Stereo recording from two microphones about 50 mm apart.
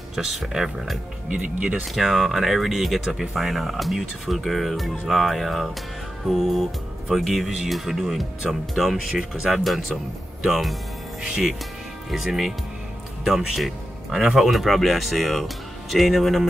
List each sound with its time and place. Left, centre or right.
0.1 s speech: centre
1.3 s speech: right
2.0 s speech: centre
7.1 s speech: centre